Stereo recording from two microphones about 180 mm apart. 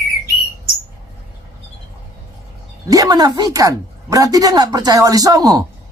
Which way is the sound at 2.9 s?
20° right (ahead or behind).